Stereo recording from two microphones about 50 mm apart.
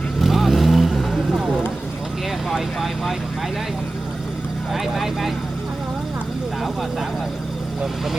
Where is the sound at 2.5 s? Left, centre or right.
Centre.